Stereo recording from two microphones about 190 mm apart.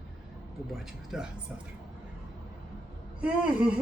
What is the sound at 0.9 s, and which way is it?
Speech, centre (ahead or behind).